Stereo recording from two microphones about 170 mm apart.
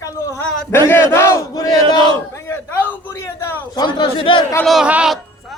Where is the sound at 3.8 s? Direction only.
30° left (ahead or behind).